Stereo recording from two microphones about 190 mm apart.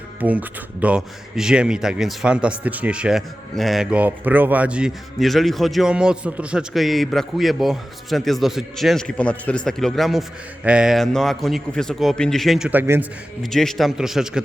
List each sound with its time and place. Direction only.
0.2 s speech: 10° right (ahead or behind)
13.4 s speech: centre (ahead or behind)